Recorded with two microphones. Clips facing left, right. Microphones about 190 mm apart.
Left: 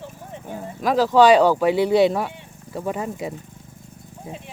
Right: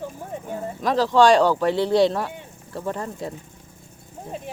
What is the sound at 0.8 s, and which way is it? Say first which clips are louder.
Speech: left 2 dB; 5° left (ahead or behind).